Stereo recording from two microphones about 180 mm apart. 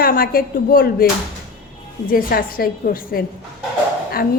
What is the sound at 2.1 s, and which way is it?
A woman's voice, 55° left (ahead or behind).